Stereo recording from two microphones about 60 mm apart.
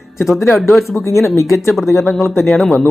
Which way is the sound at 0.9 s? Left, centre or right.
Left.